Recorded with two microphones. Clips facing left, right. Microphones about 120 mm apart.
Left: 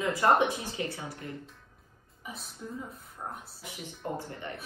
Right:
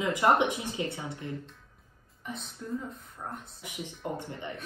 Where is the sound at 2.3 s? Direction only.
5° left (ahead or behind).